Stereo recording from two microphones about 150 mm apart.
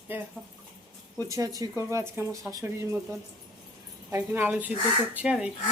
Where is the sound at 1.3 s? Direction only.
20° right (ahead or behind).